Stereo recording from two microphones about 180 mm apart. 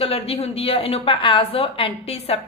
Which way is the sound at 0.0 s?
30° left (ahead or behind).